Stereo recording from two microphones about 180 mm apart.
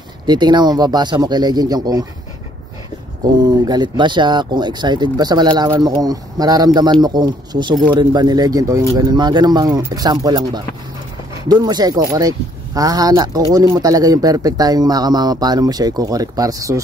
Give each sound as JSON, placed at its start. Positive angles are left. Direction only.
{"t": 0.3, "sound": "speech", "side_deg": -25}
{"t": 3.2, "sound": "speech", "side_deg": -20}